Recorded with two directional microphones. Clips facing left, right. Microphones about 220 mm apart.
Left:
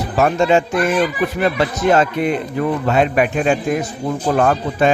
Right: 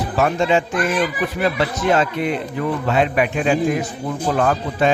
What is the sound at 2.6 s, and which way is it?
Speech, 45° left (ahead or behind).